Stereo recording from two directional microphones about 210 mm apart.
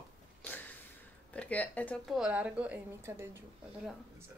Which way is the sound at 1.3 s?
5° left (ahead or behind).